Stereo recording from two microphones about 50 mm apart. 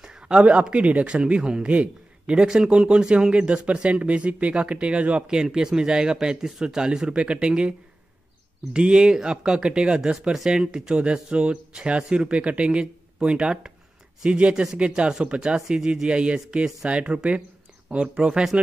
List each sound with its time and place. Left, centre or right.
0.0 s speech: centre
5.3 s speech: centre
8.7 s speech: centre